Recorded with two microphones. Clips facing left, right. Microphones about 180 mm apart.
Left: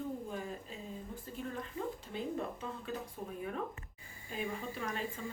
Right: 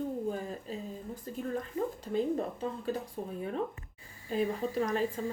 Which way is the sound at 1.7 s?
40° right (ahead or behind).